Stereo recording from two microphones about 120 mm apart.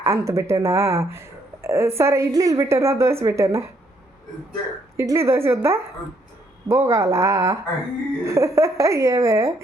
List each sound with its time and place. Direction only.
0.0 s a woman's voice: 25° right (ahead or behind)
4.9 s a woman's voice: 25° right (ahead or behind)